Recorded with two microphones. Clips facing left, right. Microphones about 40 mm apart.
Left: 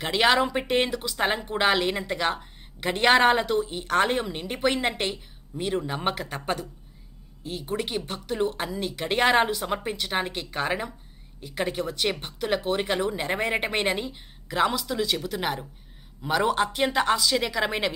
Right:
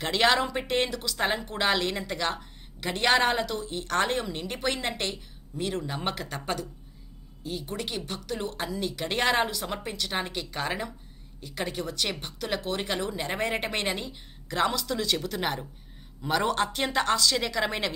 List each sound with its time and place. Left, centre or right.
0.0 s a woman's voice: centre
3.7 s a woman's voice: centre